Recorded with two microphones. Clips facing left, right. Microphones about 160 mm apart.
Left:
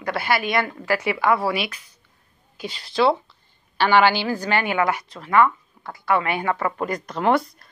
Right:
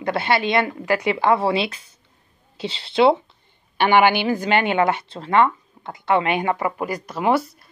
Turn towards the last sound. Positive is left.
turn(degrees=-5)  # may be behind; listen again after turning